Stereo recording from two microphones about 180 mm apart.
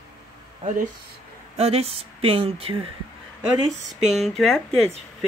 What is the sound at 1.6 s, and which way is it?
Speech, 35° right (ahead or behind).